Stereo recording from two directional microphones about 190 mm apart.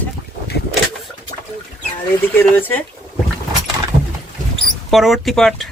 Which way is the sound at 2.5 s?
10° left (ahead or behind).